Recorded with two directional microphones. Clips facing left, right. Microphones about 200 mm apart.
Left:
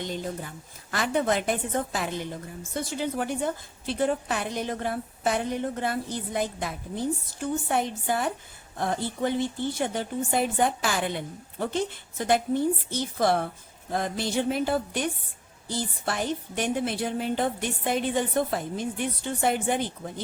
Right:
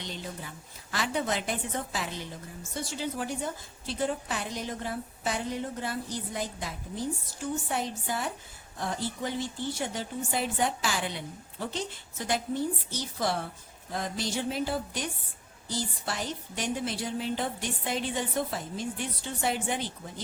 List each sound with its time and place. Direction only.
0.0 s a woman's voice: 45° left (ahead or behind)